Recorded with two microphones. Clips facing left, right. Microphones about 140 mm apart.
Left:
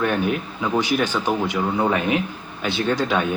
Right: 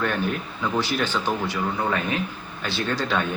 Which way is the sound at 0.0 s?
10° left (ahead or behind).